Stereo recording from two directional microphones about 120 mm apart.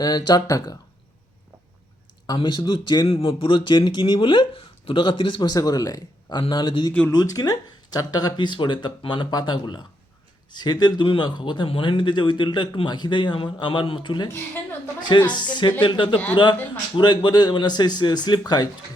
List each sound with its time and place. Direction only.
0.0 s speech: 35° left (ahead or behind)
2.2 s speech: 35° left (ahead or behind)
3.1 s speech: 50° left (ahead or behind)